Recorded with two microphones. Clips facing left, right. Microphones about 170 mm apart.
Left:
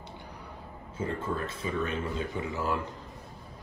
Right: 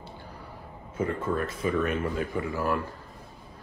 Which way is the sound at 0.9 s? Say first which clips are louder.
Right 4 dB; 30° left (ahead or behind).